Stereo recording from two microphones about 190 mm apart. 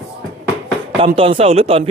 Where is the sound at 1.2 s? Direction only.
30° right (ahead or behind).